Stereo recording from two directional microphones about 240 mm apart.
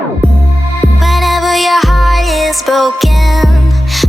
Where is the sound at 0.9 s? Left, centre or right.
Centre.